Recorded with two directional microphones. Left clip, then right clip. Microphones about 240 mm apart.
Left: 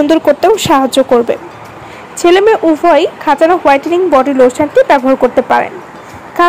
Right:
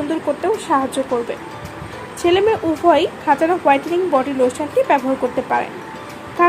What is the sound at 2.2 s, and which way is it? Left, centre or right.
A woman's voice, centre.